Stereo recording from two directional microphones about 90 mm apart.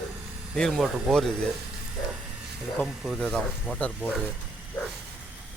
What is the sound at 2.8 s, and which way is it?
Speech, centre (ahead or behind).